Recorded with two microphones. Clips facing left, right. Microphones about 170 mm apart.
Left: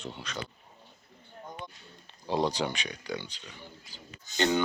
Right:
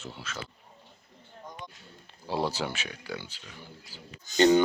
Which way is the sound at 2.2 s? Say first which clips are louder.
Left 2 dB; 5° right (ahead or behind).